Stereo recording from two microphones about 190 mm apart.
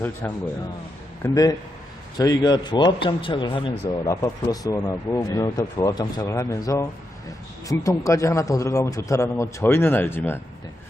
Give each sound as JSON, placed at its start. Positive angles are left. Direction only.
{"t": 1.2, "sound": "a man's voice", "side_deg": 20}